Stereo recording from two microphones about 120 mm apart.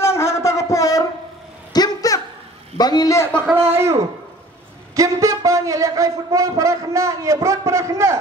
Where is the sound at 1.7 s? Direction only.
30° left (ahead or behind).